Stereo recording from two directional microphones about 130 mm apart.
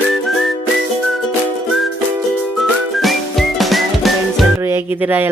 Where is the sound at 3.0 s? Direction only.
Centre (ahead or behind).